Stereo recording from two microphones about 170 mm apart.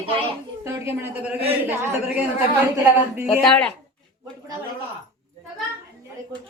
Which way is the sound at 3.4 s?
5° left (ahead or behind).